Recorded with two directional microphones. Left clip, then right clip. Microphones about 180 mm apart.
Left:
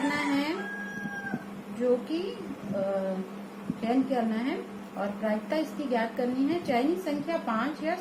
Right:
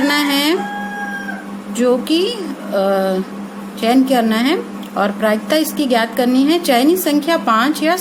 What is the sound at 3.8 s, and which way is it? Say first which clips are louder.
A woman's voice: right 14 dB; 55° right (ahead or behind).